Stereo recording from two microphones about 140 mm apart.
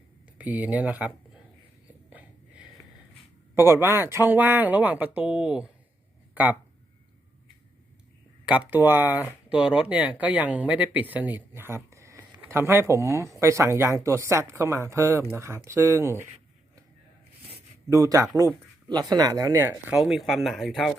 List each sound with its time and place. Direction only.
0.3 s speech: 10° right (ahead or behind)
2.0 s a sound: 10° right (ahead or behind)
3.5 s speech: 15° right (ahead or behind)
8.4 s speech: 10° right (ahead or behind)
17.8 s speech: 25° right (ahead or behind)
20.0 s speech: centre (ahead or behind)